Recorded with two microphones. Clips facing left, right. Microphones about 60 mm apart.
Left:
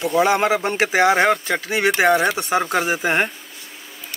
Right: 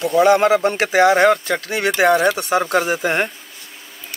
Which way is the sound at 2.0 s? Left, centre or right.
Centre.